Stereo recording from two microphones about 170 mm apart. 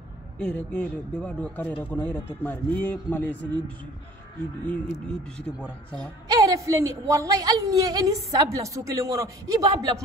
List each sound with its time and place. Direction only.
0.4 s speech: 10° left (ahead or behind)
5.4 s speech: 5° left (ahead or behind)
6.6 s a woman's voice: 20° right (ahead or behind)